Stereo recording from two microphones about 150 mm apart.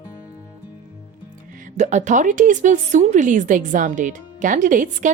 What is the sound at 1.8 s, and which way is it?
Speech, 50° right (ahead or behind).